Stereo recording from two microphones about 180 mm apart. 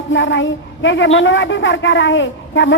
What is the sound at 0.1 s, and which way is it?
A woman's voice, 90° left.